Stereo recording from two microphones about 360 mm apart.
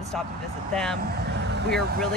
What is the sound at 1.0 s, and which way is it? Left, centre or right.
Speech, right.